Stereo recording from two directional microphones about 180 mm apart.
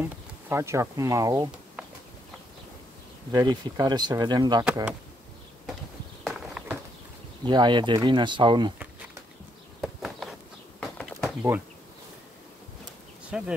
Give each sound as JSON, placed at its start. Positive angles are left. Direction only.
{"t": 0.0, "sound": "speech", "side_deg": -15}
{"t": 3.3, "sound": "speech", "side_deg": -25}
{"t": 6.2, "sound": "clip-clop", "side_deg": 0}
{"t": 7.4, "sound": "speech", "side_deg": -25}
{"t": 9.8, "sound": "a sound", "side_deg": -5}
{"t": 13.3, "sound": "speech", "side_deg": -5}